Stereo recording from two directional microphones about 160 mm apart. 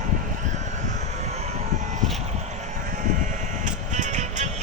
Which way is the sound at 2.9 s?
50° right (ahead or behind).